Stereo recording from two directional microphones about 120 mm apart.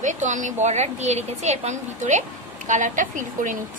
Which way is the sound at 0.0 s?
90° right.